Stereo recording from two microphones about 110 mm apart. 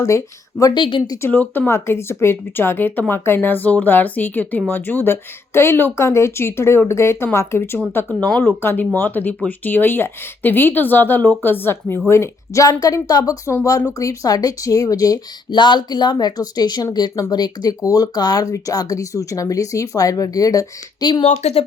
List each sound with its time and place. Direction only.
0.7 s a woman's voice: 50° left (ahead or behind)
1.3 s speech: 15° left (ahead or behind); by 15.5 s 35° left (ahead or behind)
15.5 s speech: 45° left (ahead or behind)
21.2 s speech: 85° left